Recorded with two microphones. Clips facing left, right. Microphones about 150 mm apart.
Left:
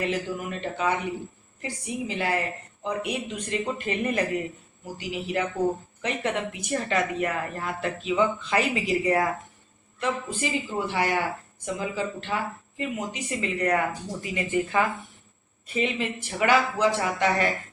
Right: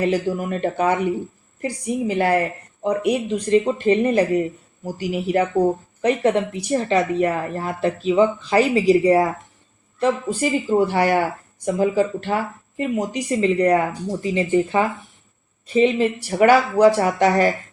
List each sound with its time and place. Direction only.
0.0 s speech: 35° right (ahead or behind)